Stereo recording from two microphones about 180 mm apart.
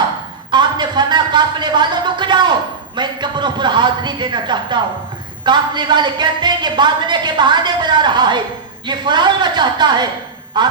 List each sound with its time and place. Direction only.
0.5 s speech: 25° right (ahead or behind)